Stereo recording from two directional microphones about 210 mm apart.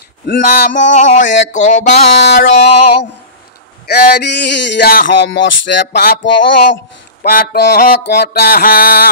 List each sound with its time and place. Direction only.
0.3 s speech: 50° left (ahead or behind)
0.9 s a sound: 35° left (ahead or behind)
2.2 s mantra: 50° left (ahead or behind)
3.8 s speech: 50° left (ahead or behind)
7.2 s mantra: 45° left (ahead or behind)